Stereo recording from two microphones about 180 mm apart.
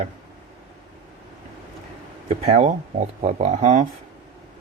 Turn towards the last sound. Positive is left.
turn(degrees=-40)  # may be behind; listen again after turning